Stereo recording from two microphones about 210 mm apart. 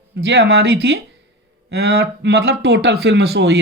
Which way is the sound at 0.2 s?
55° right (ahead or behind).